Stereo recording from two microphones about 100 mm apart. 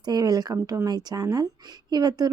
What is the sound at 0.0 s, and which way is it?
A woman's voice, 40° right (ahead or behind).